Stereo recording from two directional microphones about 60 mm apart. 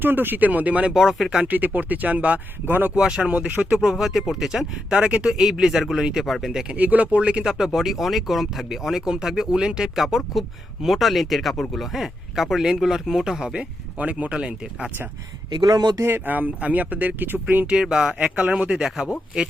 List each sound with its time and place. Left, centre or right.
0.0 s speech: right
0.9 s speech: centre
1.5 s speech: right
2.9 s speech: centre
3.8 s speech: centre
6.5 s speech: centre
6.7 s speech: right
7.4 s speech: centre
13.5 s speech: right
16.0 s speech: right
17.7 s speech: centre
18.2 s speech: right
18.5 s speech: centre